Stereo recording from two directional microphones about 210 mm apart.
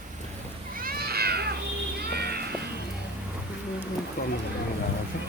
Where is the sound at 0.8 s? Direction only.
45° right (ahead or behind).